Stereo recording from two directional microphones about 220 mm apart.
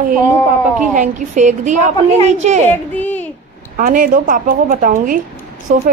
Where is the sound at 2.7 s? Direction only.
10° left (ahead or behind).